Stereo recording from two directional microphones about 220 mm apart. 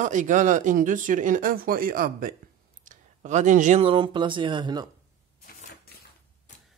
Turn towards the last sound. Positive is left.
turn(degrees=45)  # may be behind; listen again after turning